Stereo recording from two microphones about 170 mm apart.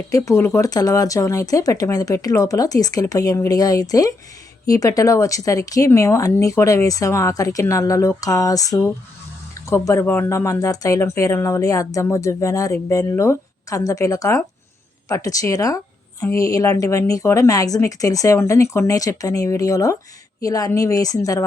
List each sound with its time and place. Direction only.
0.1 s speech: 20° left (ahead or behind)